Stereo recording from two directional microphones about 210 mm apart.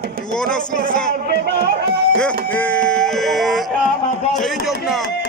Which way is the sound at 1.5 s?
50° right (ahead or behind).